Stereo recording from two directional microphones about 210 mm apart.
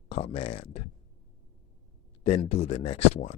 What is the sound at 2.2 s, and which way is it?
Speech, 30° left (ahead or behind).